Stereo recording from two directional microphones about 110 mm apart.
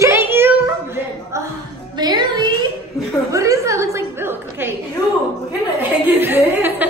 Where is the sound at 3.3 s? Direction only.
30° right (ahead or behind).